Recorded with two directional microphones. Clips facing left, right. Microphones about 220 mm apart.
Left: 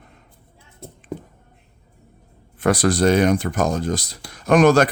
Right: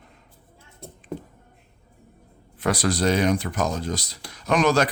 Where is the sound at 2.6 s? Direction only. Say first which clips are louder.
Left 5 dB; 50° left (ahead or behind).